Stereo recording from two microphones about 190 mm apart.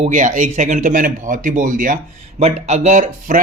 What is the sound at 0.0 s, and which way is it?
Speech, 40° right (ahead or behind).